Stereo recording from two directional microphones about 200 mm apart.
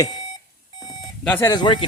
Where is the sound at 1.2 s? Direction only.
10° left (ahead or behind).